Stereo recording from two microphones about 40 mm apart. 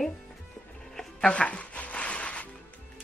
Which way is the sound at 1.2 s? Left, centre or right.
Left.